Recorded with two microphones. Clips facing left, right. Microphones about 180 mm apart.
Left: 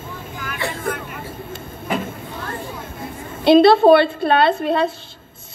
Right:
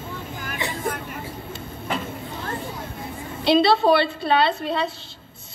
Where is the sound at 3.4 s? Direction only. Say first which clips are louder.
Left 7 dB; 50° left (ahead or behind).